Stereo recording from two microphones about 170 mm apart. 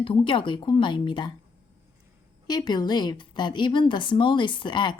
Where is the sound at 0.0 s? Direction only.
30° left (ahead or behind).